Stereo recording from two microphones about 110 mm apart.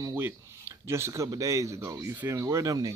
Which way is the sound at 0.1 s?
20° right (ahead or behind).